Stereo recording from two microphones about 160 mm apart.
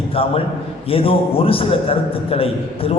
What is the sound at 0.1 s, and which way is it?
A man's voice, 35° left (ahead or behind).